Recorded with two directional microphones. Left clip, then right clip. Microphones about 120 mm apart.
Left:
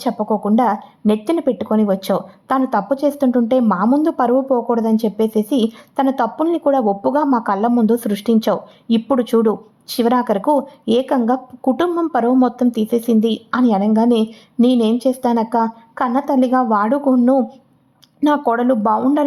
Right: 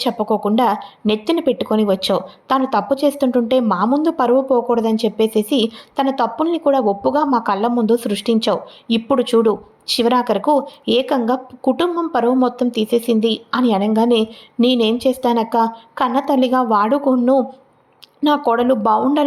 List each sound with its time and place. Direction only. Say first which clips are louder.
0.0 s speech: right 1 dB; centre (ahead or behind); by 7.7 s 15° left (ahead or behind)
7.8 s speech: right 1 dB; centre (ahead or behind)
12.9 s a woman's voice: right 3 dB; 25° left (ahead or behind)
13.8 s speech: even; centre (ahead or behind)
18.2 s speech: even; 5° left (ahead or behind)